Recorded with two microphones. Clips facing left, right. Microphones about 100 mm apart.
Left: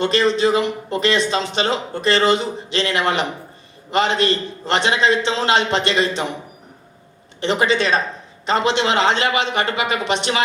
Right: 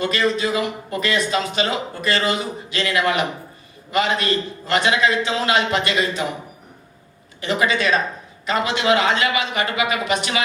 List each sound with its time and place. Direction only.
0.0 s speech: 30° left (ahead or behind)
7.4 s speech: 30° left (ahead or behind)